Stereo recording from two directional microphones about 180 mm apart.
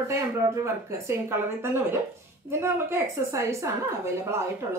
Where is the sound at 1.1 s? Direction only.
15° right (ahead or behind).